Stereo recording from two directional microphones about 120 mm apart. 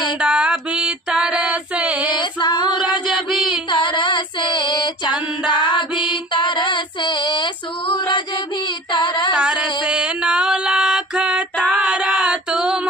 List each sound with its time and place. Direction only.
0.2 s music: 10° right (ahead or behind)
2.0 s female singing: 40° left (ahead or behind)
3.2 s a sound: centre (ahead or behind)
3.7 s female singing: 45° left (ahead or behind)
8.6 s child singing: 40° left (ahead or behind)
9.3 s music: 10° right (ahead or behind)
11.7 s female singing: 10° right (ahead or behind)